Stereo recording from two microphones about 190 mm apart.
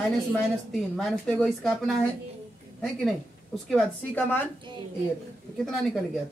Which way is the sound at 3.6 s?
5° left (ahead or behind).